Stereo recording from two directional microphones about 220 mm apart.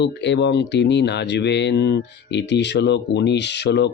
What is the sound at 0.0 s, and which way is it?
Speech, 50° left (ahead or behind).